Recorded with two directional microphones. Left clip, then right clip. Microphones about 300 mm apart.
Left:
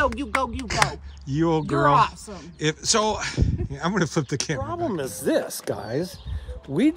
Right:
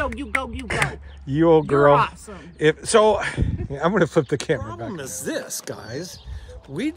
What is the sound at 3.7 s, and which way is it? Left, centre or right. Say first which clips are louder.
Speech: right 7 dB; centre.